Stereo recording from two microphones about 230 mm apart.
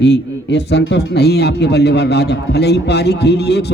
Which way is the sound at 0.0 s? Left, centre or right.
Left.